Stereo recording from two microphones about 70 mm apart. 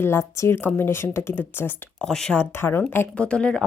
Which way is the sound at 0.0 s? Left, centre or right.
Left.